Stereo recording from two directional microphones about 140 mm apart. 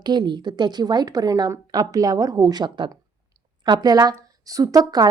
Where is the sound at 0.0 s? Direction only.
35° right (ahead or behind).